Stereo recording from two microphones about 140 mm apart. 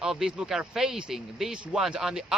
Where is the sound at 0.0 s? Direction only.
5° right (ahead or behind).